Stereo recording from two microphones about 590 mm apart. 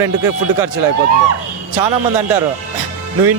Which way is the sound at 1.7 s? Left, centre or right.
Right.